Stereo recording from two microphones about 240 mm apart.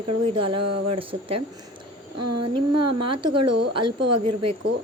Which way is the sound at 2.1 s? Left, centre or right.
Right.